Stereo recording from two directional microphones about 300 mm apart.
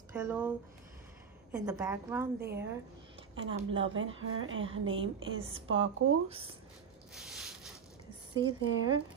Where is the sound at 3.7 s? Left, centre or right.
Right.